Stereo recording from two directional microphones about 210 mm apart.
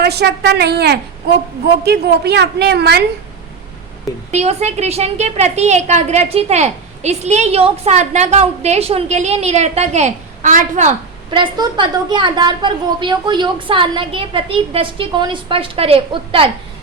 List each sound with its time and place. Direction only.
0.0 s a woman's voice: 50° right (ahead or behind)
4.3 s a woman's voice: 30° right (ahead or behind)
11.3 s a woman's voice: 20° right (ahead or behind)